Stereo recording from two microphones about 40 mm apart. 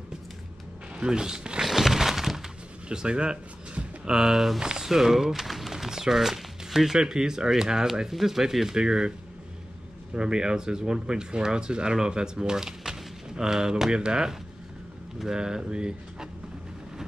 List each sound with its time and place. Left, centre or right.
0.9 s speech: right
1.6 s a sound: centre
2.9 s speech: right
10.1 s speech: right